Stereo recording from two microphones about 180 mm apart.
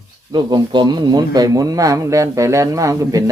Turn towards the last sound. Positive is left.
turn(degrees=-20)  # may be behind; listen again after turning